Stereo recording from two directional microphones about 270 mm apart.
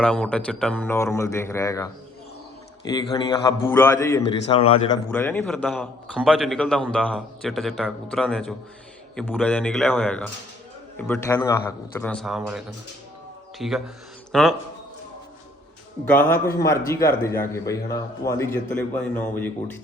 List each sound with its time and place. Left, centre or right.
0.0 s a man's voice: centre
5.1 s a man's voice: centre
16.5 s a man's voice: centre